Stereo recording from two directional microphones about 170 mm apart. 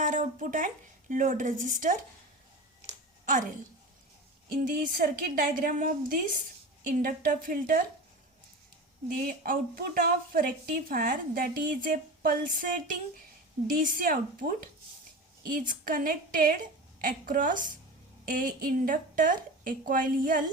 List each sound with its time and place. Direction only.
0.0 s a woman's voice: 50° right (ahead or behind)
3.2 s a woman's voice: 50° right (ahead or behind)
4.5 s a woman's voice: 50° right (ahead or behind)
9.0 s a woman's voice: 55° right (ahead or behind)